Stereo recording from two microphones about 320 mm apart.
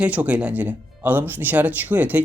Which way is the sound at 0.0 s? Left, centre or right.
Centre.